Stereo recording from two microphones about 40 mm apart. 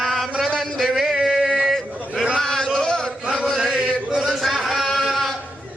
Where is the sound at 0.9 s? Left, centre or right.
Centre.